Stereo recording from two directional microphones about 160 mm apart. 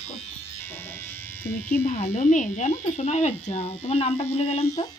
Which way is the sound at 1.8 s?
45° left (ahead or behind).